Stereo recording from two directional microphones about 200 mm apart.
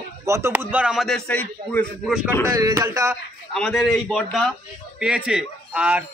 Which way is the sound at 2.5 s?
15° right (ahead or behind).